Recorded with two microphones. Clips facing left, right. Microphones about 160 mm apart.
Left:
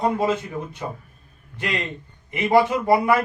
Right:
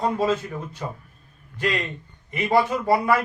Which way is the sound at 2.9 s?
20° left (ahead or behind).